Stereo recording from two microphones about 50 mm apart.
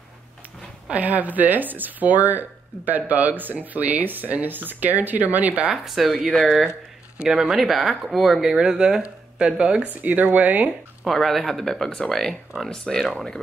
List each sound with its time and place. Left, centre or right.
0.8 s speech: right
5.9 s speech: centre
7.2 s speech: centre
7.4 s speech: centre
8.5 s speech: centre
10.0 s speech: right
11.1 s speech: centre